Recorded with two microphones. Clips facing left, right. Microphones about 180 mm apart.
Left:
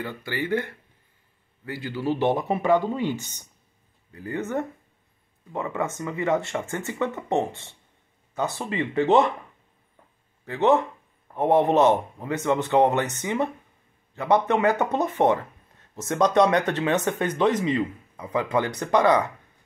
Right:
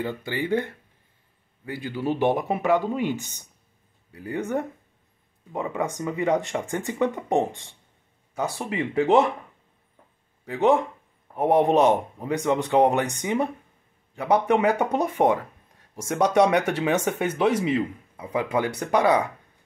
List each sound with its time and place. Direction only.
0.0 s speech: 20° right (ahead or behind)
10.4 s speech: 10° right (ahead or behind)